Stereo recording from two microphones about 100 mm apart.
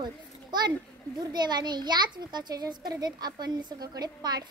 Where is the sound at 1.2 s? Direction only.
45° right (ahead or behind).